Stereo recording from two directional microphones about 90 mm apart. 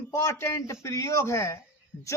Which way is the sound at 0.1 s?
30° left (ahead or behind).